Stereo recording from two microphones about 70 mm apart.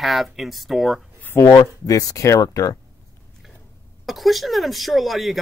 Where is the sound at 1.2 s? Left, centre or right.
Left.